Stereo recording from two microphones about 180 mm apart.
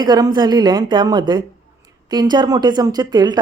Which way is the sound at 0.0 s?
25° right (ahead or behind).